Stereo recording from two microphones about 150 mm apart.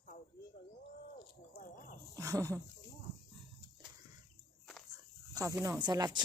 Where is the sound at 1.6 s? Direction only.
65° left (ahead or behind).